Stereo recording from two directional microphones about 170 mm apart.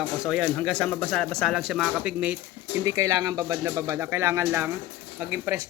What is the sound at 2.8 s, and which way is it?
Speech, 20° right (ahead or behind).